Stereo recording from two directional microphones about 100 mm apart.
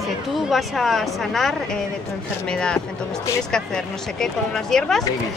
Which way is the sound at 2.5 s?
10° left (ahead or behind).